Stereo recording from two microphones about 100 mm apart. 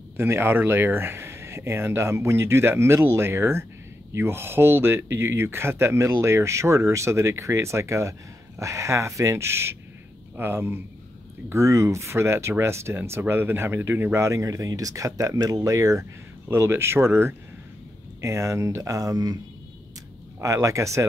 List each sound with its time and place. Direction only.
0.2 s speech: 25° right (ahead or behind); by 19.3 s 40° right (ahead or behind)
20.3 s speech: 30° right (ahead or behind)